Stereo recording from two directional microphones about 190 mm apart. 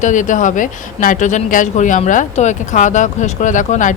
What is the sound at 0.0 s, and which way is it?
Speech, 40° left (ahead or behind).